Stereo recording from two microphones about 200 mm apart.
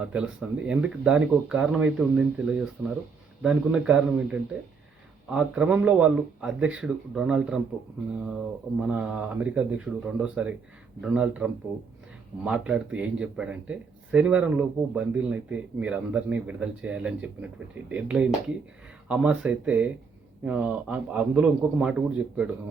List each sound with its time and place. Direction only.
0.1 s speech: 5° right (ahead or behind)
8.8 s speech: 5° right (ahead or behind)